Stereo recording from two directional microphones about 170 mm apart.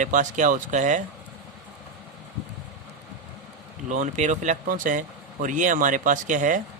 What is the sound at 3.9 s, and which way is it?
Speech, 45° right (ahead or behind).